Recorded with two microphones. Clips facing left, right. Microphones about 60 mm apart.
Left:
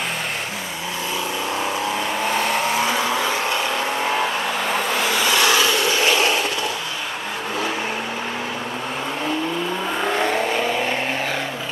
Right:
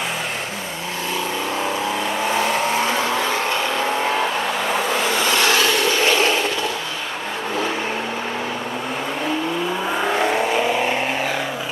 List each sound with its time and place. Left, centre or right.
2.2 s vehicle: centre
4.6 s vehicle: centre
5.3 s vehicle: right
9.9 s vehicle: centre